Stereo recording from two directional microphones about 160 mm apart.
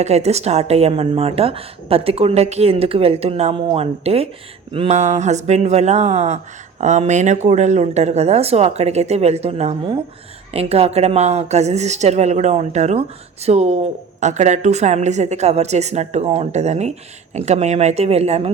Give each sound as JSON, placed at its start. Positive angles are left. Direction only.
{"t": 0.0, "sound": "speech", "side_deg": -40}
{"t": 4.9, "sound": "a woman's voice", "side_deg": -45}